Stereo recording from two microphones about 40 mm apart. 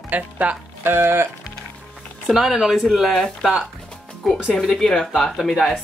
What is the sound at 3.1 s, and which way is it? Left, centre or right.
Speech, centre.